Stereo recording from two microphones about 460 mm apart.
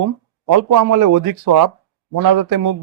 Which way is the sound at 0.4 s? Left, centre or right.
Right.